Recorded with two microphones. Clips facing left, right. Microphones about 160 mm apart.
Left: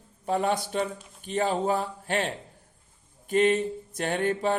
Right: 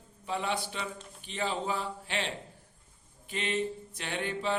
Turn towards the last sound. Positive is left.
turn(degrees=45)  # may be behind; listen again after turning